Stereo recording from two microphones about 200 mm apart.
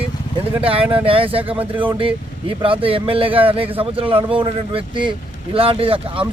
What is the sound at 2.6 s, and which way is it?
Speech, 25° right (ahead or behind).